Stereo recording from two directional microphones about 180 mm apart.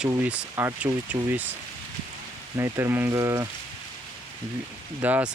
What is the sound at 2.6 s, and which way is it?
Speech, 15° right (ahead or behind).